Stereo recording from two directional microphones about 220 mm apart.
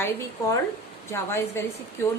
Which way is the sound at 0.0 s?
15° left (ahead or behind).